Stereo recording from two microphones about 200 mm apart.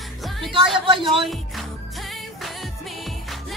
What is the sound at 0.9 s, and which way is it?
Speech, 25° right (ahead or behind).